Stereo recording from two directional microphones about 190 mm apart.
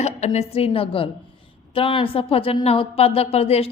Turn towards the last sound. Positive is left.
turn(degrees=30)  # may be behind; listen again after turning